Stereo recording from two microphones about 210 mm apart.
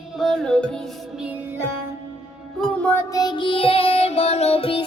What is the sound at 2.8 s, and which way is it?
Music, 15° left (ahead or behind).